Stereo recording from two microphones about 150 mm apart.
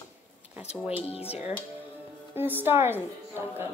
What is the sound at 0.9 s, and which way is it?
Speech, 40° left (ahead or behind).